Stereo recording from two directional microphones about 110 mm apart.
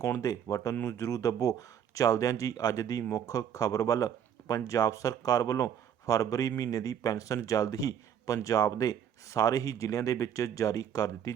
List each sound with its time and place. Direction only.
0.0 s speech: 30° left (ahead or behind)